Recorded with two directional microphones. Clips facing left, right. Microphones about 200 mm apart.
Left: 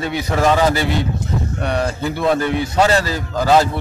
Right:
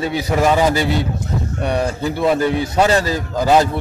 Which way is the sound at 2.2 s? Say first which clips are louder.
Right 1 dB; 10° right (ahead or behind).